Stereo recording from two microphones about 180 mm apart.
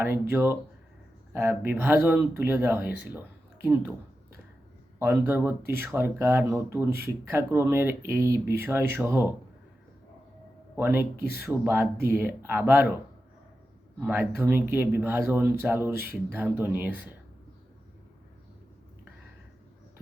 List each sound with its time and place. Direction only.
0.0 s speech: 10° right (ahead or behind)
4.9 s speech: 10° right (ahead or behind)
10.8 s speech: 10° right (ahead or behind)
11.2 s speech: 60° left (ahead or behind)
11.4 s speech: 10° right (ahead or behind)
14.0 s speech: 10° right (ahead or behind)